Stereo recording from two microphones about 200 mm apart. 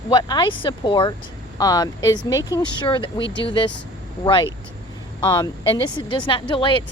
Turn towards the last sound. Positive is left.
turn(degrees=25)  # may be behind; listen again after turning